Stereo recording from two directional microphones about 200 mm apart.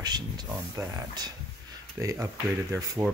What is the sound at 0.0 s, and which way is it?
Speech, 20° right (ahead or behind).